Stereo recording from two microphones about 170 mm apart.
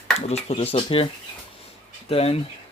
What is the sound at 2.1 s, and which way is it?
Speech, 35° left (ahead or behind).